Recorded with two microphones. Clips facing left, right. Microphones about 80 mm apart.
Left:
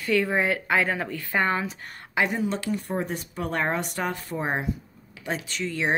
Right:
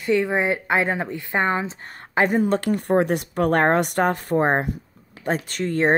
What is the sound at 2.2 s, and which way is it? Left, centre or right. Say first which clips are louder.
Speech: right 6 dB; right.